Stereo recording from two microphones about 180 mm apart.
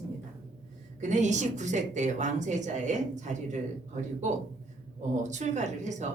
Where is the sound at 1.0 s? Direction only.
40° right (ahead or behind).